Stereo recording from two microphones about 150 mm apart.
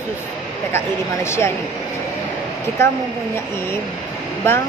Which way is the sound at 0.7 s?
15° left (ahead or behind).